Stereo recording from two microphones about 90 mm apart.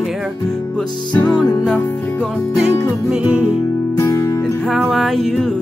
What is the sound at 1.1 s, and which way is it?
Music, 10° left (ahead or behind).